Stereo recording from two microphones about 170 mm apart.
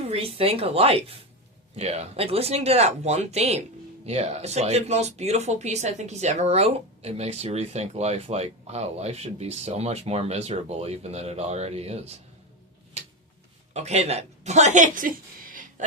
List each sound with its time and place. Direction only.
0.1 s speech: 35° right (ahead or behind)
13.7 s a woman's voice: 40° right (ahead or behind); by 15.6 s 55° right (ahead or behind)